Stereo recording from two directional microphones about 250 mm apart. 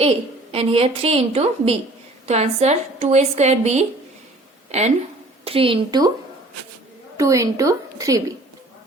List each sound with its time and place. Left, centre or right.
0.5 s a woman's voice: right
7.2 s a woman's voice: centre